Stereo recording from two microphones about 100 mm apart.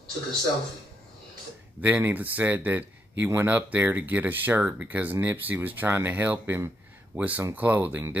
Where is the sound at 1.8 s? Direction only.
20° right (ahead or behind).